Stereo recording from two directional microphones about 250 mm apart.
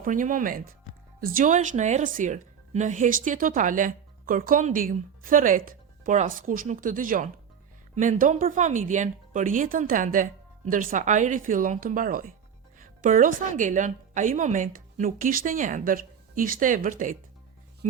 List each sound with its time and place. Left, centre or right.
0.0 s a woman's voice: right